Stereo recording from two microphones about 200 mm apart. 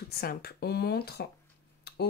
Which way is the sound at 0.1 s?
50° left (ahead or behind).